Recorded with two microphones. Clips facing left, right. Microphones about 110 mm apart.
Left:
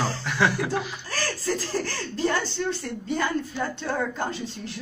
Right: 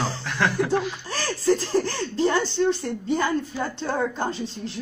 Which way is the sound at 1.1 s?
25° right (ahead or behind).